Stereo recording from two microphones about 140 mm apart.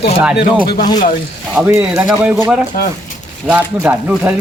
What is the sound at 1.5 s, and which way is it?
Speech, 15° right (ahead or behind).